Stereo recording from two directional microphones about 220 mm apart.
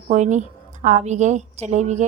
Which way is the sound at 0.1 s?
35° right (ahead or behind).